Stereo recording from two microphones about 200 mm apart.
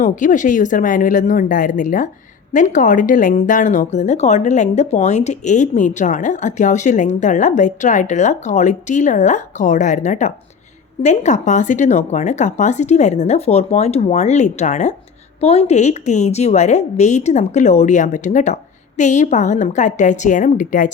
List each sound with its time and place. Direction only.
0.0 s a woman's voice: 40° left (ahead or behind)